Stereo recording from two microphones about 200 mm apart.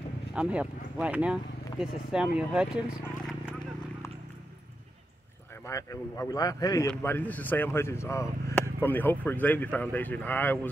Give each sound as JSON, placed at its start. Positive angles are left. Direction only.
{"t": 0.3, "sound": "speech", "side_deg": -5}
{"t": 5.7, "sound": "speech", "side_deg": 15}